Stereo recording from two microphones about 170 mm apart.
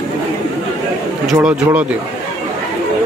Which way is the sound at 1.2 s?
5° right (ahead or behind).